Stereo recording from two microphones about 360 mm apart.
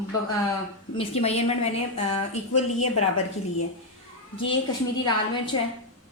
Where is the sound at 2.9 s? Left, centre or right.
Left.